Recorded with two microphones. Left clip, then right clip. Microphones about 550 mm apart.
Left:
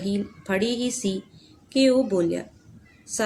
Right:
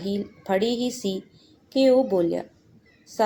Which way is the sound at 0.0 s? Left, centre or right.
Left.